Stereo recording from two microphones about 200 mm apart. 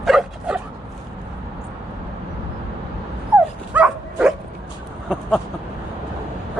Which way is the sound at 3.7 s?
5° right (ahead or behind).